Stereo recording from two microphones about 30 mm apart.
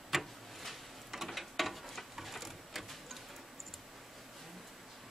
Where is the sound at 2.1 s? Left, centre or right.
Centre.